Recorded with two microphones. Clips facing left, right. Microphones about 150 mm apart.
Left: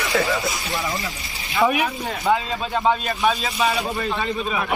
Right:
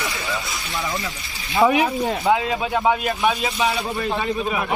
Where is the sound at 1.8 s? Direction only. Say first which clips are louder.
Right 2 dB; 10° right (ahead or behind).